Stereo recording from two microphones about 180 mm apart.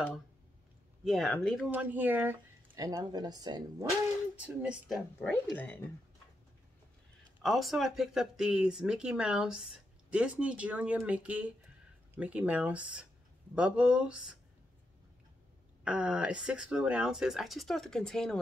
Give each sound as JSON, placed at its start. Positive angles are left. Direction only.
{"t": 1.0, "sound": "speech", "side_deg": 0}
{"t": 1.7, "sound": "speech", "side_deg": -10}
{"t": 4.4, "sound": "speech", "side_deg": -5}
{"t": 7.4, "sound": "speech", "side_deg": 0}
{"t": 15.8, "sound": "speech", "side_deg": -5}